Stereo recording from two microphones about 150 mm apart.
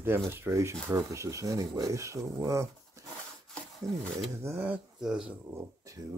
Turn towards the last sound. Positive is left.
turn(degrees=-20)  # may be behind; listen again after turning